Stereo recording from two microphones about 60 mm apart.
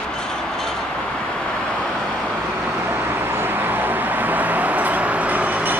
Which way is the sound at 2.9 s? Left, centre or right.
Right.